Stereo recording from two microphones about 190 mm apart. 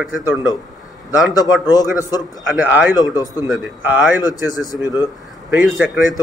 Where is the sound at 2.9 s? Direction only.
20° left (ahead or behind).